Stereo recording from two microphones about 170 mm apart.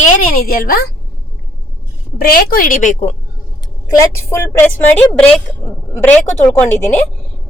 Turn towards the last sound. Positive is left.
turn(degrees=10)  # may be behind; listen again after turning